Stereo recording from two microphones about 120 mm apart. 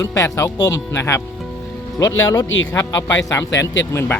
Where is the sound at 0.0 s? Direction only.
25° left (ahead or behind).